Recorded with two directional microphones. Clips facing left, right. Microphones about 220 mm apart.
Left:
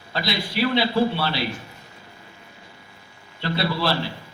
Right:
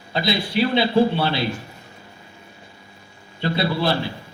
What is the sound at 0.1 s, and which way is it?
A man's voice, 20° right (ahead or behind).